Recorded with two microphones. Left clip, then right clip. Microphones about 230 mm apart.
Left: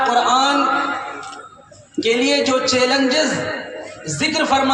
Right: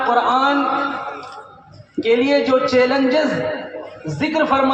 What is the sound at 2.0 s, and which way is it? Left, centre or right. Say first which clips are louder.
A man's voice: right 1 dB; left.